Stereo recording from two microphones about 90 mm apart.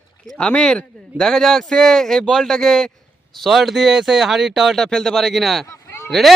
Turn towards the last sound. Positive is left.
turn(degrees=0)  # may be behind; listen again after turning